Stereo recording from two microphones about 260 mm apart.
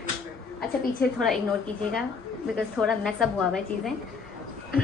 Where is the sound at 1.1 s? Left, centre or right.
Centre.